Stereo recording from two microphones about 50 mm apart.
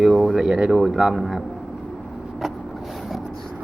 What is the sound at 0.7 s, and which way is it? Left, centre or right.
Speech, centre.